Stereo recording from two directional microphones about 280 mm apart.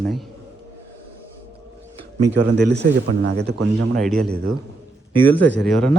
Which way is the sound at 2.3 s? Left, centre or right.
Right.